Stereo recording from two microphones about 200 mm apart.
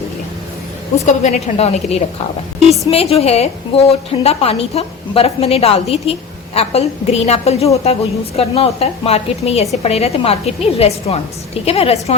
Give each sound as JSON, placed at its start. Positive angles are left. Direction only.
{"t": 1.0, "sound": "a woman's voice", "side_deg": 35}